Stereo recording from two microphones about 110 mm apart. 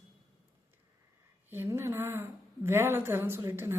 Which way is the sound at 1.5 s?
20° right (ahead or behind).